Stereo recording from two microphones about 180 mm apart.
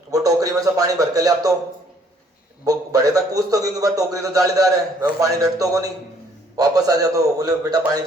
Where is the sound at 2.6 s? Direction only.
20° right (ahead or behind).